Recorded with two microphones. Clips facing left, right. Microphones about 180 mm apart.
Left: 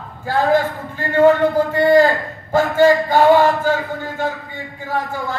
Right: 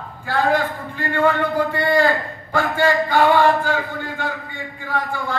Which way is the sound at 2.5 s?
45° left (ahead or behind).